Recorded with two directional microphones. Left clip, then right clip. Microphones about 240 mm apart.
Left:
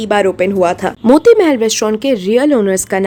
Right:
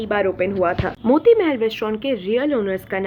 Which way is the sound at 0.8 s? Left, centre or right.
Left.